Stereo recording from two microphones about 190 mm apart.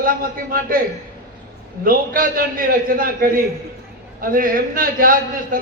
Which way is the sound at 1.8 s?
50° right (ahead or behind).